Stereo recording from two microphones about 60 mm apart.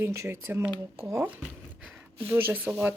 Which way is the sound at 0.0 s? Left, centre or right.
Right.